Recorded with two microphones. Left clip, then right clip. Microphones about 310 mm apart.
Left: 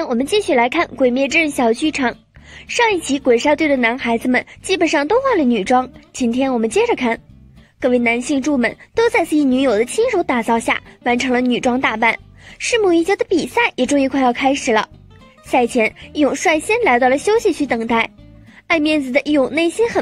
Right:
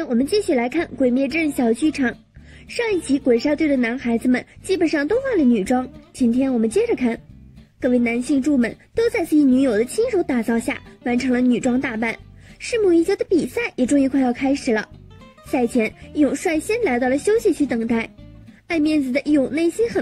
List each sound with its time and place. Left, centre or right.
0.3 s a woman's voice: centre
7.9 s a woman's voice: centre
15.5 s speech: left
15.8 s a woman's voice: centre